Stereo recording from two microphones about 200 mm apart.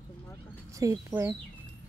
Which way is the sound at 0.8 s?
15° right (ahead or behind).